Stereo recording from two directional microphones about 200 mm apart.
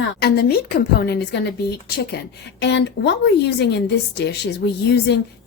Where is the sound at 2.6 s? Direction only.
60° left (ahead or behind).